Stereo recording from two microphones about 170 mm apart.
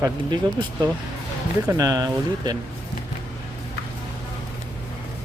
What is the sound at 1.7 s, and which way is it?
Speech, 20° right (ahead or behind).